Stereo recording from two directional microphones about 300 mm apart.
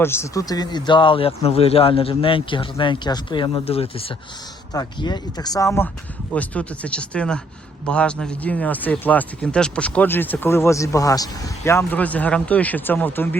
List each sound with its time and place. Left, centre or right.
0.0 s speech: centre